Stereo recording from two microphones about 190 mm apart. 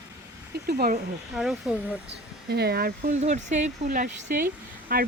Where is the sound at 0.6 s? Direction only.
55° right (ahead or behind).